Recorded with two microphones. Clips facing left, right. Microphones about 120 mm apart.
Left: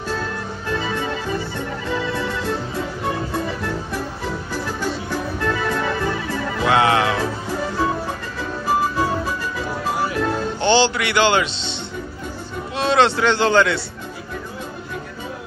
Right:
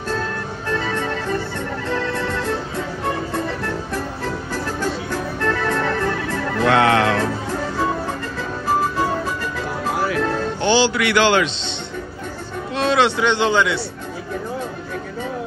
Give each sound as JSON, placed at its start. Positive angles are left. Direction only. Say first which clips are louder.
{"t": 0.1, "sound": "music", "louder": "right 2 dB", "side_deg": 5}
{"t": 1.9, "sound": "organ", "louder": "right 1 dB", "side_deg": 5}
{"t": 3.3, "sound": "music", "louder": "even", "side_deg": 5}
{"t": 8.6, "sound": "music", "louder": "even", "side_deg": 5}
{"t": 10.6, "sound": "a man's voice", "louder": "even", "side_deg": -5}
{"t": 12.7, "sound": "a sound", "louder": "even", "side_deg": 0}
{"t": 13.0, "sound": "speech", "louder": "left 3 dB", "side_deg": -15}